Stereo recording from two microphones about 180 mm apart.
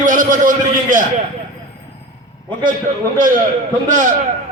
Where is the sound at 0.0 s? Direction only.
45° right (ahead or behind).